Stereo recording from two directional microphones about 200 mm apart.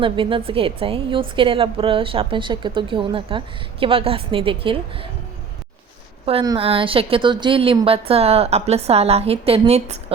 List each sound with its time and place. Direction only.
0.0 s a woman's voice: 25° right (ahead or behind)
6.2 s a woman's voice: 30° right (ahead or behind)